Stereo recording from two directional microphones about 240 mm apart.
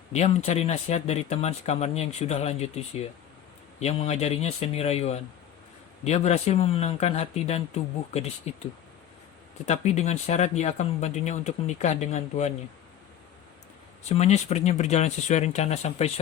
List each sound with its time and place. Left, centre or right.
0.1 s speech: left
9.6 s speech: left
14.1 s speech: left